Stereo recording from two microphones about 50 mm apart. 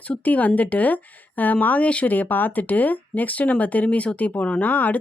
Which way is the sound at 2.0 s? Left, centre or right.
Left.